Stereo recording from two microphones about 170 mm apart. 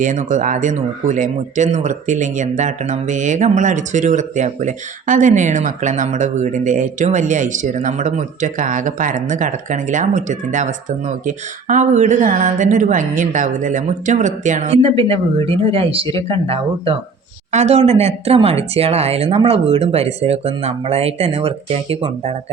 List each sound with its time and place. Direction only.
0.0 s speech: 50° right (ahead or behind)